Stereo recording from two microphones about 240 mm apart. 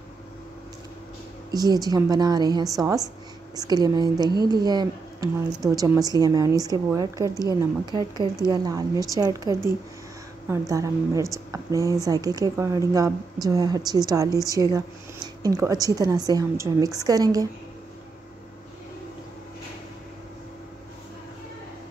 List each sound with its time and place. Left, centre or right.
1.5 s speech: centre